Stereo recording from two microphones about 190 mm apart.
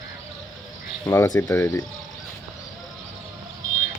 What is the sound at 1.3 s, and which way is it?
Speech, 15° left (ahead or behind).